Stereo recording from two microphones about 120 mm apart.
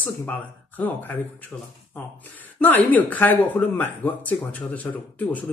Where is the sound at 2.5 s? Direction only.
15° left (ahead or behind).